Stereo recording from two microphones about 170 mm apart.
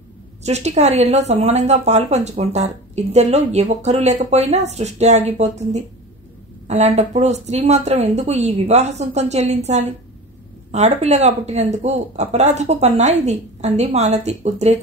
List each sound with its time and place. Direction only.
0.4 s speech: 40° right (ahead or behind)
10.7 s speech: 40° right (ahead or behind)